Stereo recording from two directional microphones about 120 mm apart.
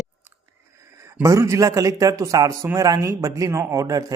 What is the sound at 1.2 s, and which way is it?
Speech, 25° right (ahead or behind).